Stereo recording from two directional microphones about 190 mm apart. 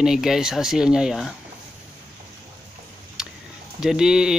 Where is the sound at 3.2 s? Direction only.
5° right (ahead or behind).